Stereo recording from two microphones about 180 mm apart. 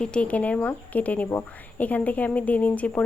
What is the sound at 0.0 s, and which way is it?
Speech, 5° left (ahead or behind).